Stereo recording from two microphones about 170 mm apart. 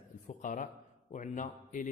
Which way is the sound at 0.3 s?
50° left (ahead or behind).